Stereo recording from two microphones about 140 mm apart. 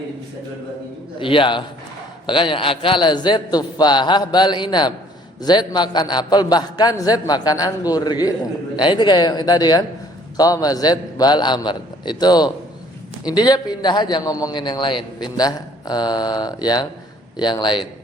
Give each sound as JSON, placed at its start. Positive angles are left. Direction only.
{"t": 1.2, "sound": "a man's voice", "side_deg": 35}